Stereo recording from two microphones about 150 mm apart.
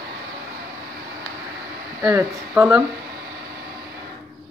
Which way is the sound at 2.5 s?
5° right (ahead or behind).